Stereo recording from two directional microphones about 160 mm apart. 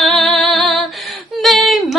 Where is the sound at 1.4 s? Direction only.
Centre (ahead or behind).